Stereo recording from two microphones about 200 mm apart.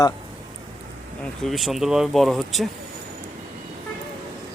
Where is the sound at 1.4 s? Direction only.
Centre (ahead or behind).